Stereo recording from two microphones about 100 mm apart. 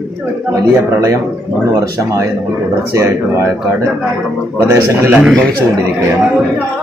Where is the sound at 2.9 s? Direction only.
30° right (ahead or behind).